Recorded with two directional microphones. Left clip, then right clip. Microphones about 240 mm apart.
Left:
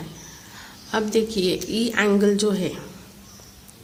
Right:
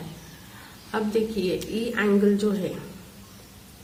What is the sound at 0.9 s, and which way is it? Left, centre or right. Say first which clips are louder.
A woman's voice: left 3 dB; left.